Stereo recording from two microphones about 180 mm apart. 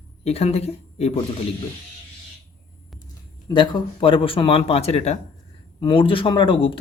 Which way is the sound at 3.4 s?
25° left (ahead or behind).